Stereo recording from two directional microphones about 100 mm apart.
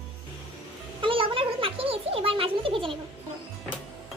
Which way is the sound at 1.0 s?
60° right (ahead or behind).